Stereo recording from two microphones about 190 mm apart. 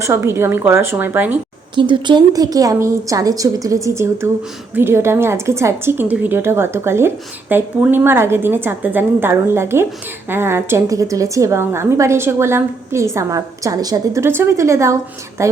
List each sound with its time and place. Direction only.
0.0 s a woman's voice: 15° right (ahead or behind)
1.7 s a woman's voice: 25° right (ahead or behind)